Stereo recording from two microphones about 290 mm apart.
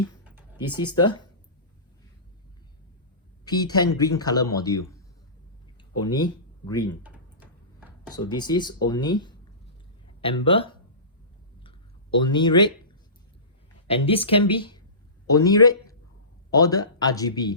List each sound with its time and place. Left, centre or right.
0.9 s speech: centre
3.4 s a man's voice: centre
8.1 s speech: centre
12.2 s speech: centre
13.8 s speech: centre